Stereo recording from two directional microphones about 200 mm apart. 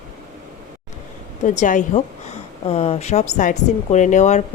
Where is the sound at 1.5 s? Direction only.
40° left (ahead or behind).